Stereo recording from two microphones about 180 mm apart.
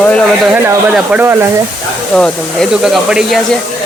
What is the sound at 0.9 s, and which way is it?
Speech, 5° right (ahead or behind).